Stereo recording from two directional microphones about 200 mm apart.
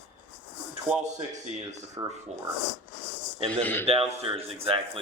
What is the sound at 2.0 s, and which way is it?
Speech, 20° right (ahead or behind).